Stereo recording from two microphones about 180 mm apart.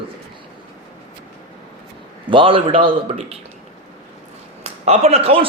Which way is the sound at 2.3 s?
30° right (ahead or behind).